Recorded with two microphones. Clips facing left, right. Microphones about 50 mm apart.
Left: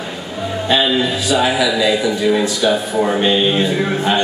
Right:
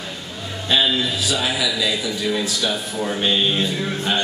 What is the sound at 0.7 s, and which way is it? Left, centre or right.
A man's voice, centre.